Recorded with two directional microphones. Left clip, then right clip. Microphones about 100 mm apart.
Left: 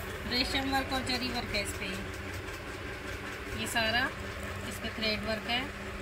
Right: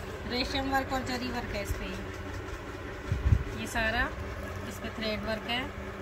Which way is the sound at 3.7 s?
25° right (ahead or behind).